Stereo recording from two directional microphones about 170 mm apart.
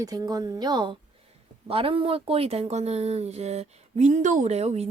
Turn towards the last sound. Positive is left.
turn(degrees=-40)  # may be behind; listen again after turning